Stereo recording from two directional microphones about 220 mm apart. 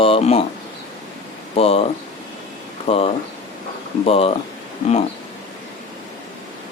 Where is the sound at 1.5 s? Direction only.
25° left (ahead or behind).